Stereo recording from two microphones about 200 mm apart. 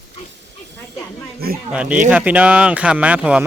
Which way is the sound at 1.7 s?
5° right (ahead or behind).